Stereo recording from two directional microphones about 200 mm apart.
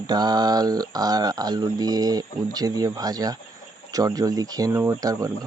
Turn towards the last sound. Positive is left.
turn(degrees=-15)  # may be behind; listen again after turning